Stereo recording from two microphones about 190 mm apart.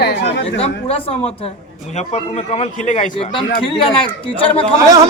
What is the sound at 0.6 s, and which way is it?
Speech, 30° left (ahead or behind).